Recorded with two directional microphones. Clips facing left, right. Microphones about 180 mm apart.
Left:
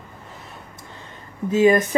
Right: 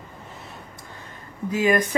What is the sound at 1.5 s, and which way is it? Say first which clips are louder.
Speech: left 5 dB; 25° left (ahead or behind).